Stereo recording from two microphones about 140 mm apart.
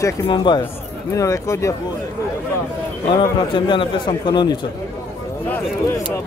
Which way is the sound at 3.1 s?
35° left (ahead or behind).